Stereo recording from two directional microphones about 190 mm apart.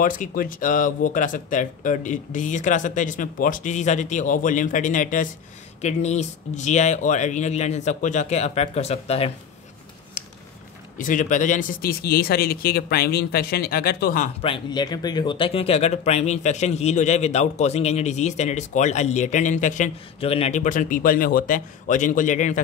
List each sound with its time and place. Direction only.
0.0 s speech: 45° left (ahead or behind)
10.2 s a sound: 40° left (ahead or behind)
11.0 s speech: 45° left (ahead or behind)
14.4 s speech: 25° left (ahead or behind); by 22.6 s 40° left (ahead or behind)